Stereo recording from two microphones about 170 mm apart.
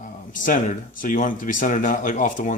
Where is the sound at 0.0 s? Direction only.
50° left (ahead or behind).